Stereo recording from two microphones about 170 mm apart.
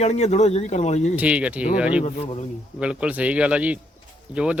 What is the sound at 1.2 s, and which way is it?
Speech, 5° right (ahead or behind).